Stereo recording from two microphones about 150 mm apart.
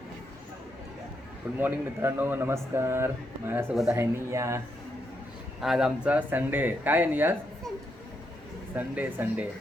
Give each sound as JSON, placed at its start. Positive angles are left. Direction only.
{"t": 1.5, "sound": "a man's voice", "side_deg": -15}
{"t": 5.5, "sound": "a man's voice", "side_deg": -5}
{"t": 8.7, "sound": "a man's voice", "side_deg": -10}